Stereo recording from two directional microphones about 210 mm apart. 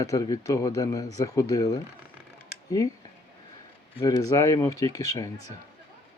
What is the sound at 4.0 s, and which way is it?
Speech, 15° left (ahead or behind).